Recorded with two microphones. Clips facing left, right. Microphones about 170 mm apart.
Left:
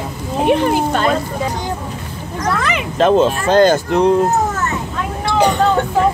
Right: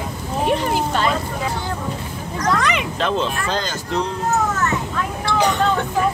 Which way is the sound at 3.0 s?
45° left (ahead or behind).